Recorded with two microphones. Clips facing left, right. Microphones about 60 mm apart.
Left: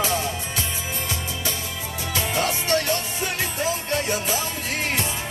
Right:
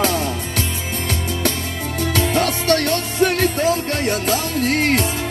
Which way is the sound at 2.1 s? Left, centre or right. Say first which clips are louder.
Right 4 dB; right.